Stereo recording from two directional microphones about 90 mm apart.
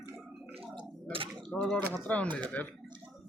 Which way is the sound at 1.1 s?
90° right.